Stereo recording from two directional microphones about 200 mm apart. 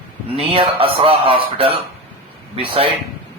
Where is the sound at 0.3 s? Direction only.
25° right (ahead or behind).